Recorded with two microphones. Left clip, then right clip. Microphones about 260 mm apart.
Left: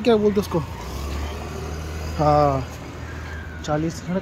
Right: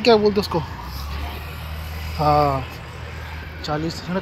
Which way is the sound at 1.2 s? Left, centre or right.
Left.